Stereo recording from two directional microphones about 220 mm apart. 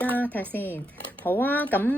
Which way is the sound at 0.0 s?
5° left (ahead or behind).